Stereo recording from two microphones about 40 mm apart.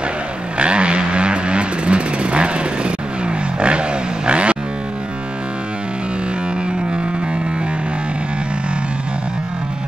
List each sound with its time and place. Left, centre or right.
0.6 s vehicle: right